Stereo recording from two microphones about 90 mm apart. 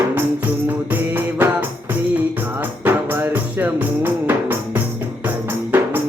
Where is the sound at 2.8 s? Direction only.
25° right (ahead or behind).